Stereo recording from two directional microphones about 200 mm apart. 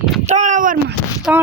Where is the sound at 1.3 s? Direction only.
5° right (ahead or behind).